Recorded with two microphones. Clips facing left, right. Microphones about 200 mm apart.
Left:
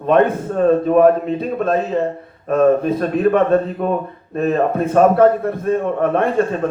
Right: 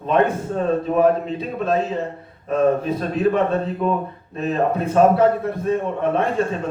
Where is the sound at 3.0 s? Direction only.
55° left (ahead or behind).